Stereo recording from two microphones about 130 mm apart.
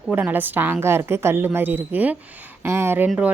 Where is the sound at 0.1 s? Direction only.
15° right (ahead or behind).